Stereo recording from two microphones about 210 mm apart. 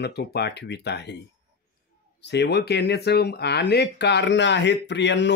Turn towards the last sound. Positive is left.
turn(degrees=55)  # may be behind; listen again after turning